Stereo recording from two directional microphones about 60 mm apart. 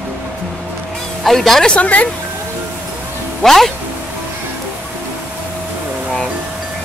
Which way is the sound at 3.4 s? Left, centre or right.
Centre.